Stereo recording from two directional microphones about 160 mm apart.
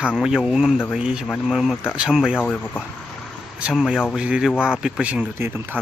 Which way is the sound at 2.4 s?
10° left (ahead or behind).